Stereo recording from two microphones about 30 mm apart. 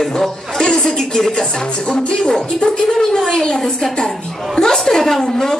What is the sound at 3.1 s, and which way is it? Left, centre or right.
Speech, left.